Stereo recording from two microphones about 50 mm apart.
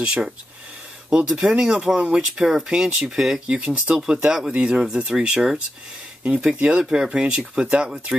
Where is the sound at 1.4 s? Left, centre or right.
Centre.